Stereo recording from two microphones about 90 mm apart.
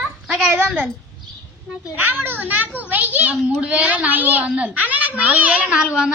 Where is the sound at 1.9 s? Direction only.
20° right (ahead or behind).